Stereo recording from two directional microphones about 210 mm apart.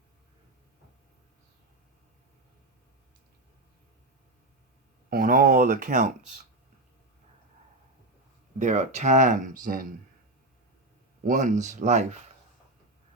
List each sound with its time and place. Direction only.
5.0 s speech: 45° right (ahead or behind)
8.5 s speech: 35° right (ahead or behind)
11.2 s speech: 40° right (ahead or behind)